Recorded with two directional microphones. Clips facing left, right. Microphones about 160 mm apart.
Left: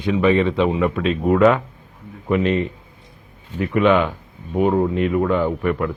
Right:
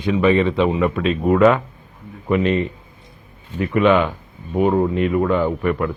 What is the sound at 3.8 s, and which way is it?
Speech, 20° right (ahead or behind).